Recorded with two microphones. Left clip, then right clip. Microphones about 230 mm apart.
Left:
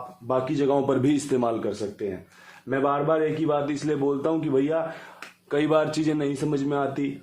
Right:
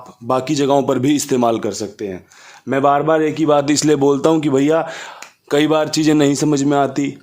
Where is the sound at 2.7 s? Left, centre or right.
Right.